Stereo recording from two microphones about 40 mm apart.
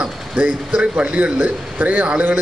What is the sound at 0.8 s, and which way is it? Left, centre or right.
Speech, right.